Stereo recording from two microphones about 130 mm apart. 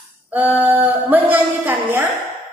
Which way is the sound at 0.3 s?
15° right (ahead or behind).